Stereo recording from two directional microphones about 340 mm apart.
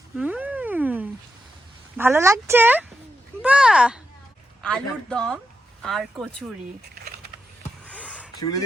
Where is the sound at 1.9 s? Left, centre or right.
Centre.